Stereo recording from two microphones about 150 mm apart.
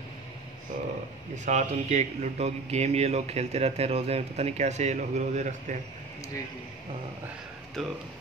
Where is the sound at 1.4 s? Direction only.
50° right (ahead or behind).